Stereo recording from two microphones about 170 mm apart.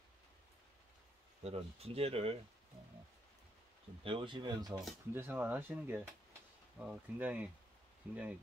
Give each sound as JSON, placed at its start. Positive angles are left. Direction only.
{"t": 1.4, "sound": "speech", "side_deg": -35}
{"t": 4.0, "sound": "speech", "side_deg": -30}
{"t": 5.1, "sound": "speech", "side_deg": -10}